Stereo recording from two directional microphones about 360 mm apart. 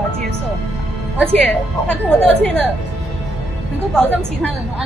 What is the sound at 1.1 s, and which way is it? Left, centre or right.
A woman's voice, centre.